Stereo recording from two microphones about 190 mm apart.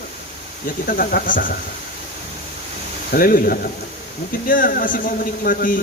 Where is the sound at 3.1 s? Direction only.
50° left (ahead or behind).